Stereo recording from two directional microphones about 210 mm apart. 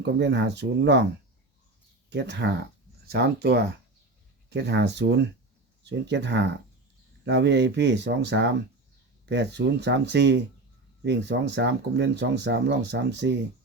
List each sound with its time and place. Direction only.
0.0 s speech: 55° right (ahead or behind)
2.0 s speech: 55° right (ahead or behind)